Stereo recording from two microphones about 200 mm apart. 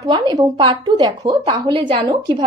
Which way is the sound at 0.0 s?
20° right (ahead or behind).